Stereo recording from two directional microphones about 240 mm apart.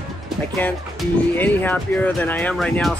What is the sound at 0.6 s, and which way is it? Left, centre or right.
Speech, centre.